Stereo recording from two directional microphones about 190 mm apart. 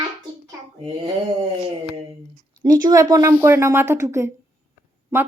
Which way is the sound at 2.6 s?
20° right (ahead or behind).